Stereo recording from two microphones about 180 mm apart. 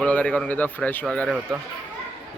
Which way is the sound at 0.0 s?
5° left (ahead or behind).